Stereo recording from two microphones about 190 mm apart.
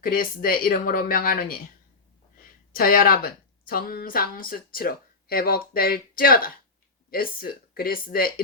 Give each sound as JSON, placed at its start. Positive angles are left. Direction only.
{"t": 0.0, "sound": "a woman's voice", "side_deg": 45}